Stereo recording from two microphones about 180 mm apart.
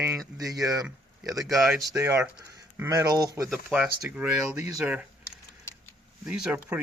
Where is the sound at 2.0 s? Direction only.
15° right (ahead or behind).